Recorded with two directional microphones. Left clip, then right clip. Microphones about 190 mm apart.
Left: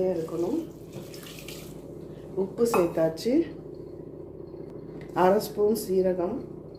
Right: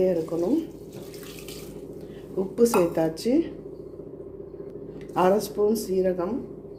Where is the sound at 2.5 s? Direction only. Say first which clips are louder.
Right 3 dB; 40° right (ahead or behind).